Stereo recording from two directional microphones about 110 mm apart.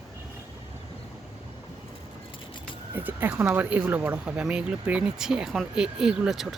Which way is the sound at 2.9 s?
20° right (ahead or behind).